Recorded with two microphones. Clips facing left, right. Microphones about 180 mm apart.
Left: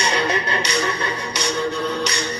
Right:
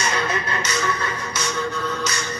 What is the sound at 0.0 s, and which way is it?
Music, 30° left (ahead or behind).